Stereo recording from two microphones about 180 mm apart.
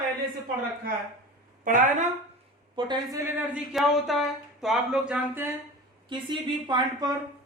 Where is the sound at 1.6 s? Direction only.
45° right (ahead or behind).